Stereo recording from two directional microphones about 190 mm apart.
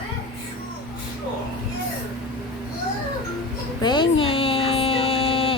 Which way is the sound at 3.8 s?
25° left (ahead or behind).